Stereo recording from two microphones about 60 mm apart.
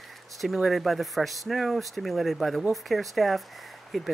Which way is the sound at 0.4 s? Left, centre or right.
Centre.